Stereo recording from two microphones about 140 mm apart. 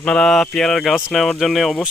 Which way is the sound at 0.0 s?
5° left (ahead or behind).